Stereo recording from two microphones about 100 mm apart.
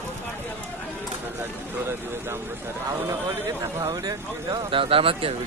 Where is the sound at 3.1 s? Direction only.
35° right (ahead or behind); by 5.3 s 65° right (ahead or behind).